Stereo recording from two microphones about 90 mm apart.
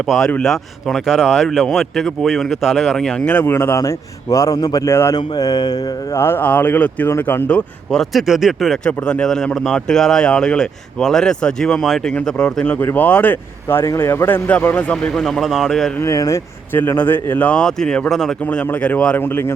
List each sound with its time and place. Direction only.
0.4 s speech: centre (ahead or behind)
3.4 s speech: 25° left (ahead or behind)
3.8 s a man's voice: 35° left (ahead or behind)
4.9 s speech: 30° left (ahead or behind)
5.1 s mantra: 45° left (ahead or behind)
6.1 s speech: 25° left (ahead or behind)
8.1 s speech: 5° right (ahead or behind)
8.8 s speech: 10° left (ahead or behind)
12.6 s speech: 20° left (ahead or behind)
13.8 s speech: 35° left (ahead or behind); by 15.9 s centre (ahead or behind)
16.0 s a man's voice: 35° left (ahead or behind)
16.7 s speech: 20° left (ahead or behind); by 18.6 s 5° left (ahead or behind)
18.7 s speech: 15° left (ahead or behind)